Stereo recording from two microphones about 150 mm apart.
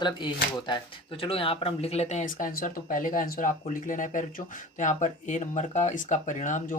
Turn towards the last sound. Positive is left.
turn(degrees=55)  # may be behind; listen again after turning